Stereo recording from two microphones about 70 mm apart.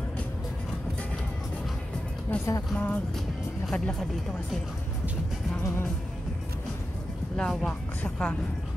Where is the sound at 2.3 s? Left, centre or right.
Centre.